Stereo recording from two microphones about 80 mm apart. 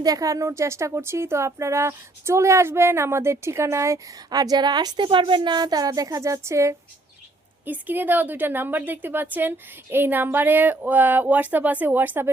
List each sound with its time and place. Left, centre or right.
0.0 s speech: right
4.3 s a woman's voice: right
7.6 s a woman's voice: right